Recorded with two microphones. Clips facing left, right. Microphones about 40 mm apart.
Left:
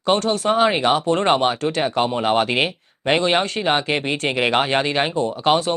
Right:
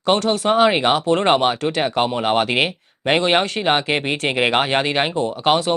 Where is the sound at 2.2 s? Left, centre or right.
Centre.